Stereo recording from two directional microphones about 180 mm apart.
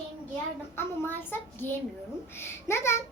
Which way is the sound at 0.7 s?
10° left (ahead or behind).